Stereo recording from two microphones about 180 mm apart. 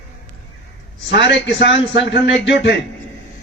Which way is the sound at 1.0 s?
80° left.